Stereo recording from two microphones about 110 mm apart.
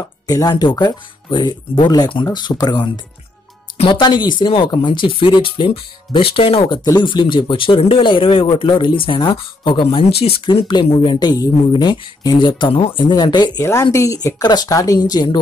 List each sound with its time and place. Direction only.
0.3 s speech: 35° left (ahead or behind)
3.7 s speech: 55° left (ahead or behind)
6.8 s speech: 40° left (ahead or behind)
11.1 s speech: 35° left (ahead or behind)
13.6 s speech: 25° left (ahead or behind); by 15.3 s 40° left (ahead or behind)